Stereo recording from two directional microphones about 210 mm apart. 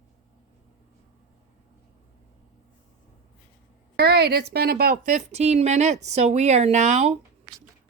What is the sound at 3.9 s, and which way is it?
A woman's voice, 50° right (ahead or behind).